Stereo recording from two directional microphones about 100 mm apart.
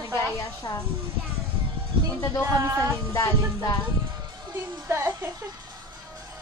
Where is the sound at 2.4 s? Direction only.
30° right (ahead or behind).